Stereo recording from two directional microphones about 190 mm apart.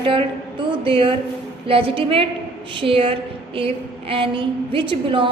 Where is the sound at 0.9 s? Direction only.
25° right (ahead or behind).